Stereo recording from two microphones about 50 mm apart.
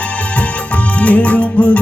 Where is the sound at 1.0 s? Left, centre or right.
Left.